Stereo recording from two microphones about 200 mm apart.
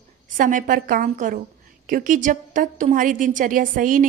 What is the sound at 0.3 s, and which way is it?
A woman's voice, 40° right (ahead or behind).